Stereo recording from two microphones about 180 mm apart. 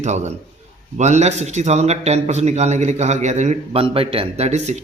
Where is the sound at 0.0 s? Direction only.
40° right (ahead or behind).